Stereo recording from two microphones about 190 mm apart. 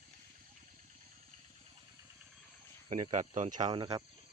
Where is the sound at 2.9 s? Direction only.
40° right (ahead or behind).